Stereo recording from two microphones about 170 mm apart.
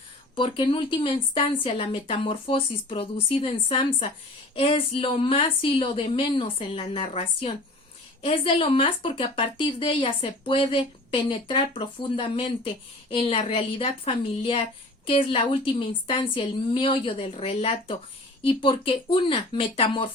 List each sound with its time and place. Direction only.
0.3 s a woman's voice: 30° left (ahead or behind)